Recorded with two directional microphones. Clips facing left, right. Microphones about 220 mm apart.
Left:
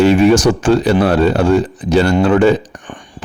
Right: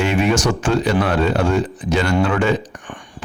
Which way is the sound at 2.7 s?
35° left (ahead or behind).